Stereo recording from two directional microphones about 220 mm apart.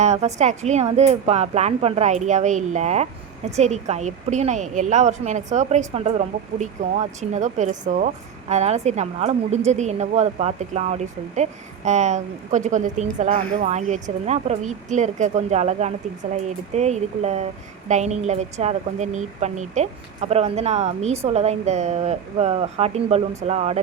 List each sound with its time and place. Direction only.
0.0 s speech: 30° right (ahead or behind)